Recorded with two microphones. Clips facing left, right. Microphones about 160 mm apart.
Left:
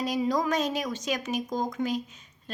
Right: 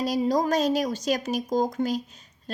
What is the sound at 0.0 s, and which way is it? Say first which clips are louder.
A woman's voice: right 3 dB; 35° right (ahead or behind).